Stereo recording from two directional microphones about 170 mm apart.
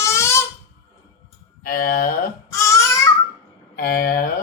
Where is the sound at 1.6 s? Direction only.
55° left (ahead or behind).